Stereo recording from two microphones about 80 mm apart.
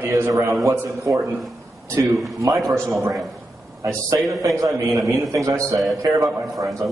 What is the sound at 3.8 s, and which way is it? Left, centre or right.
Speech, right.